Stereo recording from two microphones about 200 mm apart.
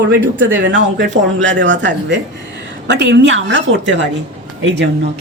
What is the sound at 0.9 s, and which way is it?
Speech, 65° right (ahead or behind).